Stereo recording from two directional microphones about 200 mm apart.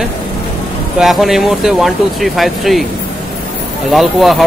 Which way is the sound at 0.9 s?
Centre (ahead or behind).